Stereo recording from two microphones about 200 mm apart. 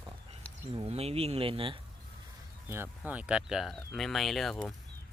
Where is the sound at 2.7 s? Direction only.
10° right (ahead or behind).